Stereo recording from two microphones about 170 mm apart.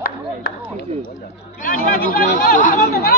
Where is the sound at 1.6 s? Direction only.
55° left (ahead or behind).